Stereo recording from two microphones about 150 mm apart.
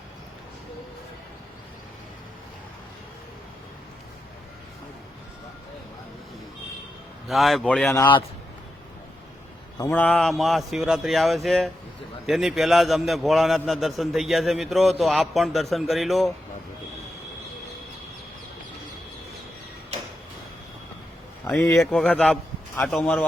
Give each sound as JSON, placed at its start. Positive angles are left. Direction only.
{"t": 7.3, "sound": "a man's voice", "side_deg": 0}
{"t": 9.9, "sound": "a man's voice", "side_deg": 10}
{"t": 21.4, "sound": "speech", "side_deg": 20}
{"t": 21.8, "sound": "a man's voice", "side_deg": 5}